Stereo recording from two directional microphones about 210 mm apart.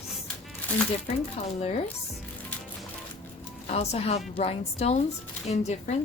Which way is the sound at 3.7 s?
30° left (ahead or behind).